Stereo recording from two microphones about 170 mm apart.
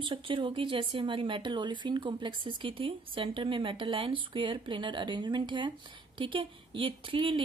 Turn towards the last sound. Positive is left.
turn(degrees=-30)  # may be behind; listen again after turning